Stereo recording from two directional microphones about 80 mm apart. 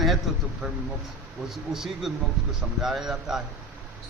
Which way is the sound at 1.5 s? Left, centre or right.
Centre.